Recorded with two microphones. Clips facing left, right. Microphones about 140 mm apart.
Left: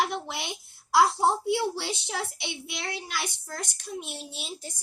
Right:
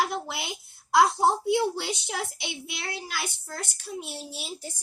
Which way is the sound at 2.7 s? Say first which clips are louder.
Even; centre (ahead or behind).